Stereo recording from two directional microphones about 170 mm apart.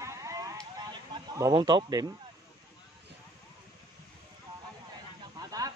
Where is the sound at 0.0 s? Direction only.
20° right (ahead or behind).